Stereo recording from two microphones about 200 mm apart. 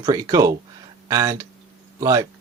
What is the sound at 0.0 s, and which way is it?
Speech, 20° right (ahead or behind).